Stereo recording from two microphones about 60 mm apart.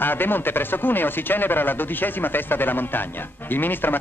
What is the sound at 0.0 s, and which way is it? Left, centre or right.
Speech, left.